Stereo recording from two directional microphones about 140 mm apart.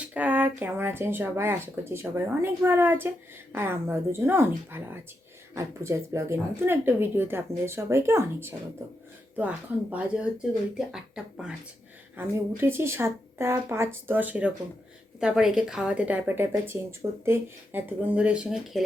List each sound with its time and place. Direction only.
0.0 s speech: 10° right (ahead or behind)
12.1 s speech: 15° right (ahead or behind)